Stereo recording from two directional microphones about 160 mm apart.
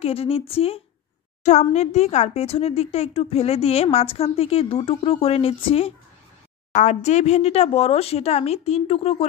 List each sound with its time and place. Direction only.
0.0 s speech: 40° left (ahead or behind)
6.7 s speech: 50° left (ahead or behind)